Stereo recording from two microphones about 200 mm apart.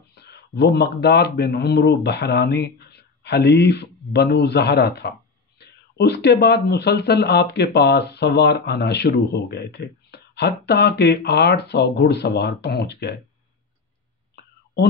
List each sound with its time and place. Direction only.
0.1 s speech: 55° left (ahead or behind)